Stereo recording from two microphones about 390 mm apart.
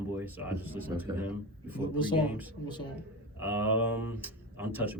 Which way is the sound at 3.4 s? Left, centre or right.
Centre.